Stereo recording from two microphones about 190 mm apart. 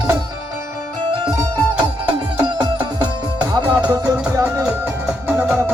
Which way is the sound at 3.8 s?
10° right (ahead or behind).